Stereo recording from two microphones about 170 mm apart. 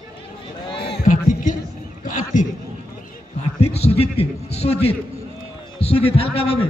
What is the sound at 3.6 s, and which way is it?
A man's voice, 40° left (ahead or behind).